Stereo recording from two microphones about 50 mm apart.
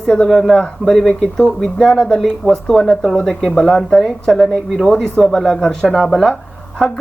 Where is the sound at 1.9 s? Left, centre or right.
Centre.